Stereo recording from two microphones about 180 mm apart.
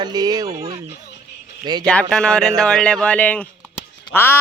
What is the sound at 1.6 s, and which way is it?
Speech, 25° right (ahead or behind).